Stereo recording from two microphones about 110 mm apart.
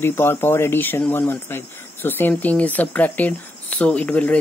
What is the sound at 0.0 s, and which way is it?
Speech, 20° left (ahead or behind).